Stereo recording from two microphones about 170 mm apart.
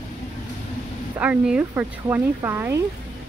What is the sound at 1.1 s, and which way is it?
Speech, 5° right (ahead or behind).